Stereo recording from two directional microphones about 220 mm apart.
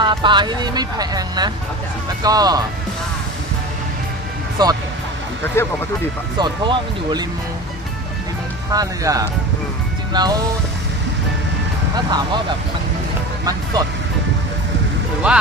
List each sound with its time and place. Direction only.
0.0 s speech: 20° right (ahead or behind)
4.6 s speech: 20° right (ahead or behind)
5.6 s speech: 10° left (ahead or behind)
6.4 s speech: 20° right (ahead or behind)
8.7 s speech: 15° right (ahead or behind)
11.9 s speech: 20° right (ahead or behind)
13.4 s speech: 15° right (ahead or behind)
15.3 s speech: 5° right (ahead or behind)